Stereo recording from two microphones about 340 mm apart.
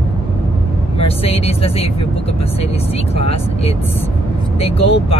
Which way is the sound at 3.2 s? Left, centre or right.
Centre.